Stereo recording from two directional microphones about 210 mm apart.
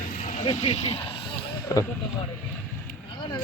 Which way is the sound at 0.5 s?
30° left (ahead or behind).